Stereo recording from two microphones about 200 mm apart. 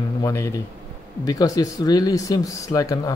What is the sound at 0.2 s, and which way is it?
A man's voice, 15° left (ahead or behind).